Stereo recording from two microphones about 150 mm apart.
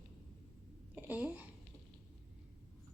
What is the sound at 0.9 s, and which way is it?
Speech, 10° right (ahead or behind).